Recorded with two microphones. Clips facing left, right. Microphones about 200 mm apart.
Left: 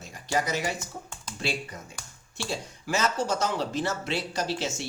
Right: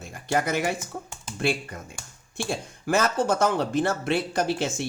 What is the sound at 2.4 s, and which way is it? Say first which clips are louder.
Speech: right 4 dB; 55° right (ahead or behind).